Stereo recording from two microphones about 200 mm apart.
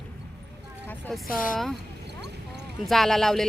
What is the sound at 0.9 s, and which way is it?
Speech, 10° left (ahead or behind).